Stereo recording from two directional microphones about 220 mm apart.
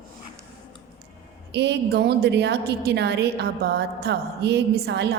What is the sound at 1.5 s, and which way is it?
A woman's voice, 50° right (ahead or behind).